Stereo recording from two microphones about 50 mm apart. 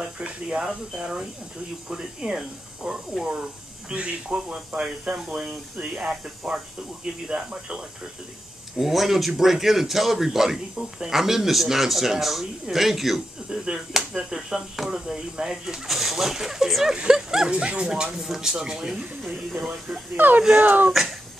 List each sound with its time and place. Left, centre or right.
0.7 s speech: centre
3.9 s speech: right
5.1 s speech: centre
8.7 s a man's voice: centre
19.2 s a man's voice: centre
20.2 s speech: right
20.9 s a man's voice: centre